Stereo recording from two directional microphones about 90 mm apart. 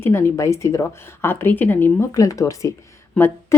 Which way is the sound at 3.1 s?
25° left (ahead or behind).